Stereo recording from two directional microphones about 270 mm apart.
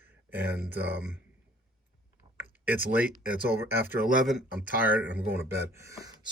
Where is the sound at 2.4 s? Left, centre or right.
Centre.